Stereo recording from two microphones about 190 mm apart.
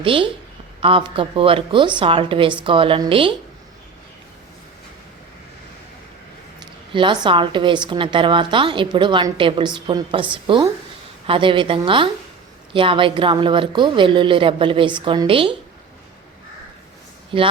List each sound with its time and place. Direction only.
0.0 s a woman's voice: 30° right (ahead or behind)
6.9 s a woman's voice: 25° right (ahead or behind)